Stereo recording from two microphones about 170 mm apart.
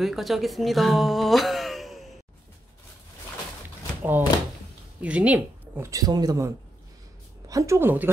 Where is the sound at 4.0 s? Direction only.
10° right (ahead or behind).